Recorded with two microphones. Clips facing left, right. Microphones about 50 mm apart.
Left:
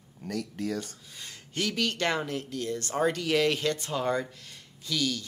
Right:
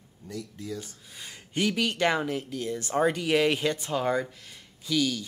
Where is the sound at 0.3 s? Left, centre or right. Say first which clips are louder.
Left 4 dB; left.